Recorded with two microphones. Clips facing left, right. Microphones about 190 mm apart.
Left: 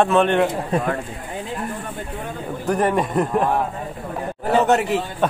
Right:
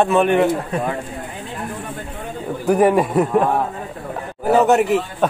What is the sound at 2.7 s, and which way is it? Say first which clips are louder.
Speech: right 5 dB; 10° right (ahead or behind).